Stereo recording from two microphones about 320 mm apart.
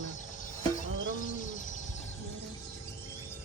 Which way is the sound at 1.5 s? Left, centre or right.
Left.